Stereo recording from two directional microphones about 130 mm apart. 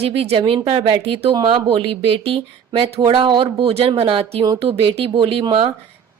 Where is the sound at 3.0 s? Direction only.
35° right (ahead or behind).